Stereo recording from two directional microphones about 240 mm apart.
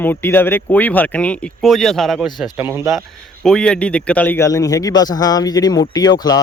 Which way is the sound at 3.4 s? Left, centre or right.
Centre.